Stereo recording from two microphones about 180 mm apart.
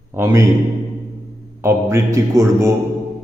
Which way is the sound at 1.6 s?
15° right (ahead or behind).